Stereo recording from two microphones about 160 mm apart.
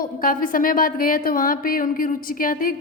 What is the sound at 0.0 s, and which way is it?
Speech, 60° left (ahead or behind).